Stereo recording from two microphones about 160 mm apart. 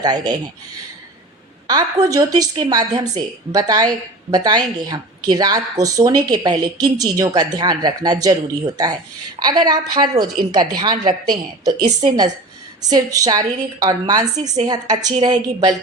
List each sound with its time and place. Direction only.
0.0 s speech: 25° right (ahead or behind)
1.6 s speech: 25° right (ahead or behind)